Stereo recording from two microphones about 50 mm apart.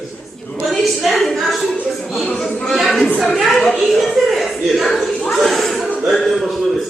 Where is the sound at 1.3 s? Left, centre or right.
Centre.